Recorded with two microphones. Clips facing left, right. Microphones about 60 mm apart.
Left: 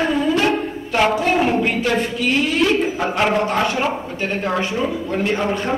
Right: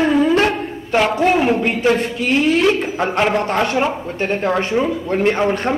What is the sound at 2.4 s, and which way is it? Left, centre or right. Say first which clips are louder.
Speech: right 3 dB; right.